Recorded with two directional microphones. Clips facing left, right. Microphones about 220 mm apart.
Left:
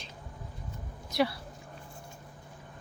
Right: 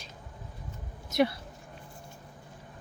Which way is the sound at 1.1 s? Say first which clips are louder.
Right 3 dB; 20° right (ahead or behind).